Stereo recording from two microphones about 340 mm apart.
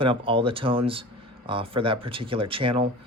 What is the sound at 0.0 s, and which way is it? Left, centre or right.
Speech, centre.